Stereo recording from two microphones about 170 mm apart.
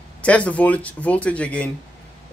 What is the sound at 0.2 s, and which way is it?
Speech, 10° left (ahead or behind).